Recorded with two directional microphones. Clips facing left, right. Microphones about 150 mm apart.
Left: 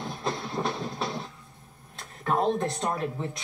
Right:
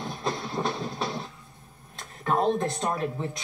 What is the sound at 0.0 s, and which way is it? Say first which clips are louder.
Train: right 1 dB; centre (ahead or behind).